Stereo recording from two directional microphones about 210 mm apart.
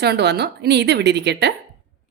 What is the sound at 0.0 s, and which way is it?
Speech, 50° right (ahead or behind).